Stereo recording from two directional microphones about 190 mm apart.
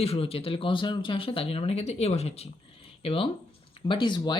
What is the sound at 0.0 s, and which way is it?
Speech, 30° left (ahead or behind).